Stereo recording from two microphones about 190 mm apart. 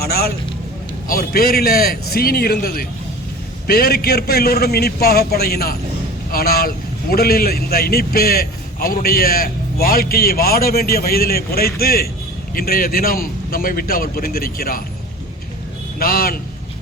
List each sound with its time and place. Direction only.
0.0 s a man's voice: 55° left (ahead or behind)
16.0 s a man's voice: 50° left (ahead or behind)